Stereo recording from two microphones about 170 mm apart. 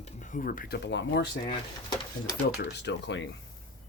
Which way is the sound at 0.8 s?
90° left.